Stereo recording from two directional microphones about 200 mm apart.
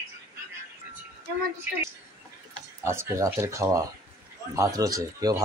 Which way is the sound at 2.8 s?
15° right (ahead or behind).